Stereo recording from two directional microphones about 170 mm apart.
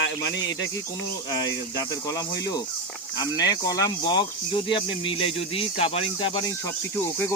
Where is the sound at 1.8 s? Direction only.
20° left (ahead or behind).